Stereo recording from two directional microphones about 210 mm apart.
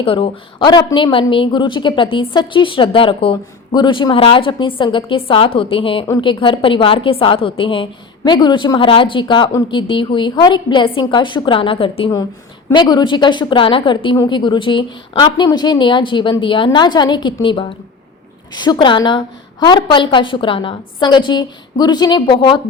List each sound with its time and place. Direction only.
0.0 s a woman's voice: 25° left (ahead or behind)